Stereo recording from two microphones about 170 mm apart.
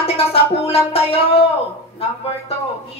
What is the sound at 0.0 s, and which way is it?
Speech, 35° left (ahead or behind).